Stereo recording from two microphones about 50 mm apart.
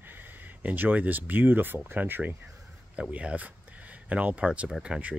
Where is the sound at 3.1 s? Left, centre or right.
Right.